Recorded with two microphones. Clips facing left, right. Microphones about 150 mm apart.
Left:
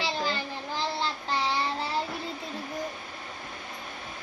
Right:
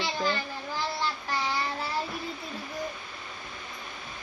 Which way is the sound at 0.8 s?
20° left (ahead or behind).